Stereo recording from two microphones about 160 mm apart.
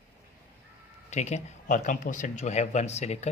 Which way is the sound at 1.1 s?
45° left (ahead or behind).